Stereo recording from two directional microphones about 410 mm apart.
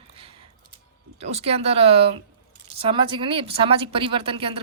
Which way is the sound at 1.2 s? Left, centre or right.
Centre.